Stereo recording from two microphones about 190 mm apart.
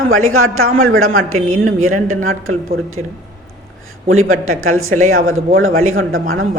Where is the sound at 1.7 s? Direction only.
90° right.